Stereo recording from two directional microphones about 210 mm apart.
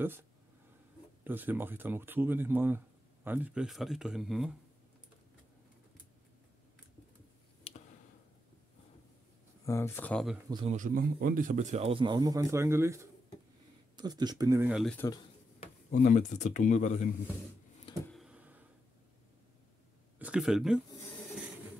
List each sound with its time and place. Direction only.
1.2 s speech: 10° right (ahead or behind)
9.7 s speech: 10° left (ahead or behind)
10.5 s a man's voice: 30° right (ahead or behind)
14.7 s speech: centre (ahead or behind)
15.6 s speech: 40° left (ahead or behind)
18.0 s a sound: centre (ahead or behind)
20.2 s speech: 5° right (ahead or behind)